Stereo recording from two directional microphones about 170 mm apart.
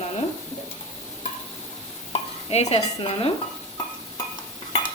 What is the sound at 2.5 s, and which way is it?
Speech, 40° left (ahead or behind).